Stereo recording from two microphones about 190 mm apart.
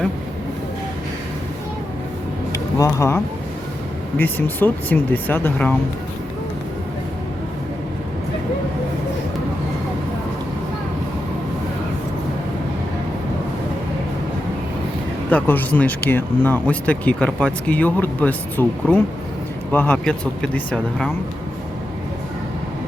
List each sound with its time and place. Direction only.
2.5 s vehicle: 20° left (ahead or behind)
4.2 s speech: 10° left (ahead or behind)
15.3 s speech: 10° left (ahead or behind)